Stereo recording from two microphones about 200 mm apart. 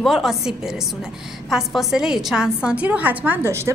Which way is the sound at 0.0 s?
Centre (ahead or behind).